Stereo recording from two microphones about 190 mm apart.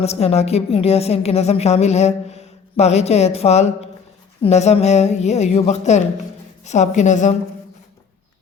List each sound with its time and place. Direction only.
0.0 s a woman's voice: 35° left (ahead or behind)